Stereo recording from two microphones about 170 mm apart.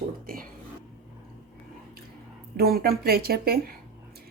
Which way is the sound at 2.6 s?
65° right (ahead or behind).